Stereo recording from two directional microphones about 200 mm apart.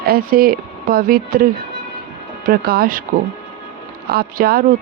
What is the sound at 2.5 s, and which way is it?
Speech, 50° right (ahead or behind).